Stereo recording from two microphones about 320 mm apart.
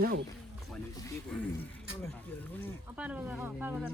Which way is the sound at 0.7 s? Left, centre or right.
Centre.